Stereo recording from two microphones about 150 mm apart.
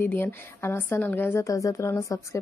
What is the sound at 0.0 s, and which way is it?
A woman's voice, 15° left (ahead or behind).